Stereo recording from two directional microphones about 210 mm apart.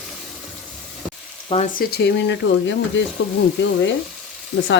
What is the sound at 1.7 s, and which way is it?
Speech, 45° left (ahead or behind).